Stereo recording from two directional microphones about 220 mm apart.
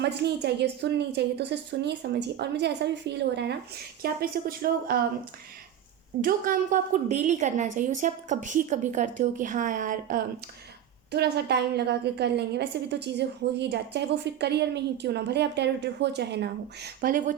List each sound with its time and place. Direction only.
0.0 s a woman's voice: 50° right (ahead or behind)
6.2 s a woman's voice: 35° right (ahead or behind)
11.1 s a woman's voice: 50° right (ahead or behind)